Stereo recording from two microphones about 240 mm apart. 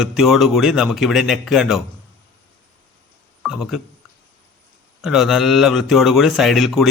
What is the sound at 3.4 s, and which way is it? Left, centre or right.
Speech, centre.